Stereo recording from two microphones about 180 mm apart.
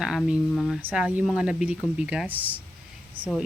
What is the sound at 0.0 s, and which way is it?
Speech, 5° right (ahead or behind).